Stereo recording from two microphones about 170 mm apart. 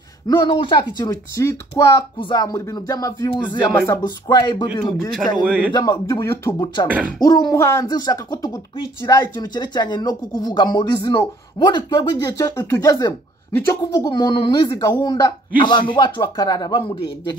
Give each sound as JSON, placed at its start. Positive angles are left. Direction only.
{"t": 0.3, "sound": "speech", "side_deg": 25}